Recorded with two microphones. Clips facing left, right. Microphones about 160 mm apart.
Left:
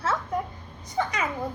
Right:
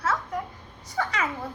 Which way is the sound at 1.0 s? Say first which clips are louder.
Left 1 dB; 20° left (ahead or behind).